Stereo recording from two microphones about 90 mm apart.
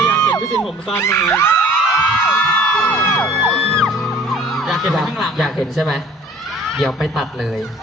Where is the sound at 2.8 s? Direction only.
25° left (ahead or behind).